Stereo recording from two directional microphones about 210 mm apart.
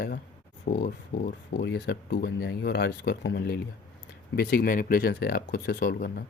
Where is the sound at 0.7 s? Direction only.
50° left (ahead or behind).